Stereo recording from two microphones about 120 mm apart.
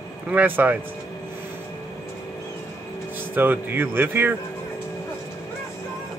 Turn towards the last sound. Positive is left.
turn(degrees=-15)  # may be behind; listen again after turning